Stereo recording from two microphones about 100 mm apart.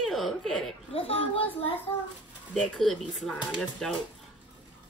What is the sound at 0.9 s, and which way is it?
Speech, 75° left (ahead or behind).